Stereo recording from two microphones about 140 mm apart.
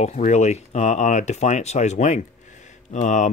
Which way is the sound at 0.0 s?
60° left (ahead or behind).